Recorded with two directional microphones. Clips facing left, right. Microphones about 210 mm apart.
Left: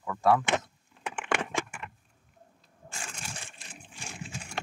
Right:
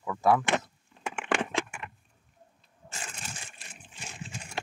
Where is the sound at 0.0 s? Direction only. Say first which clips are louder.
Even; 10° right (ahead or behind).